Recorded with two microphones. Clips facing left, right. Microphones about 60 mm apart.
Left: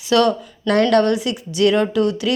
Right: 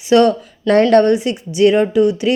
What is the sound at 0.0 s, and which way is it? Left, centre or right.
A woman's voice, right.